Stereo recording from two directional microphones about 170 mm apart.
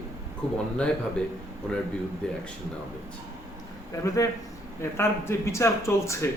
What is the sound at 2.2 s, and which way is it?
Speech, 5° left (ahead or behind).